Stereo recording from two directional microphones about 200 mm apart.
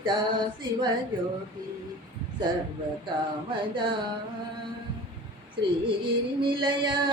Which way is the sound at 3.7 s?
25° right (ahead or behind).